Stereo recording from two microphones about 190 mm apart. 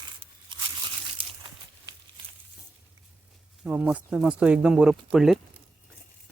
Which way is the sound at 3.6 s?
10° right (ahead or behind).